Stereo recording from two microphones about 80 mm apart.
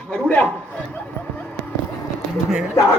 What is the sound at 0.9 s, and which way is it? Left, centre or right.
Dog, left.